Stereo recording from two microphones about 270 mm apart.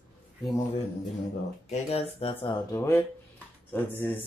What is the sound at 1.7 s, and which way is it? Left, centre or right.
Speech, left.